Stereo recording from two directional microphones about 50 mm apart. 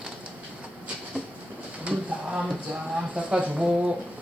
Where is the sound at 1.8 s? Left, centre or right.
Right.